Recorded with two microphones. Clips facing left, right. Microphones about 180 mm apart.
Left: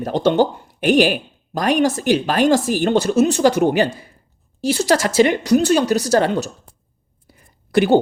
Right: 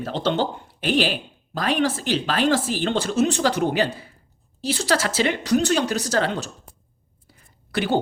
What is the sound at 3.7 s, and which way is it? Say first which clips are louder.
Speech: left 5 dB; 45° left (ahead or behind).